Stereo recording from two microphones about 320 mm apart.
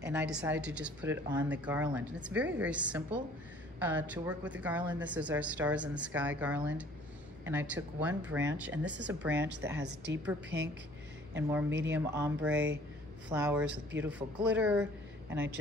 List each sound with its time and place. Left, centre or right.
0.0 s speech: centre
9.8 s a woman's voice: right
10.2 s a woman's voice: centre
11.9 s speech: centre